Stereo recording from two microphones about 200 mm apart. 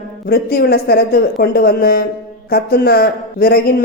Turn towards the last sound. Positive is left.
turn(degrees=50)  # may be behind; listen again after turning